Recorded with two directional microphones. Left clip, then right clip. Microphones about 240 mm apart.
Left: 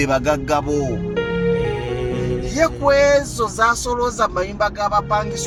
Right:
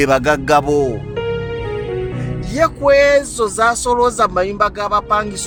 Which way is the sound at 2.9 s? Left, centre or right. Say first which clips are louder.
Right 4 dB; right.